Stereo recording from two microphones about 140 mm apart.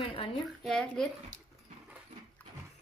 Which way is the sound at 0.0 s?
40° left (ahead or behind).